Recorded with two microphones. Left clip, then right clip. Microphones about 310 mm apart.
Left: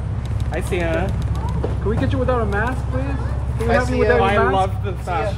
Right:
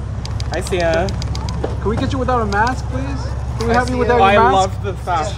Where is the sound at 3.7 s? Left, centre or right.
Left.